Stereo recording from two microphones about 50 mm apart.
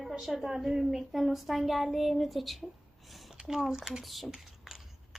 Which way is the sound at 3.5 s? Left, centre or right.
Centre.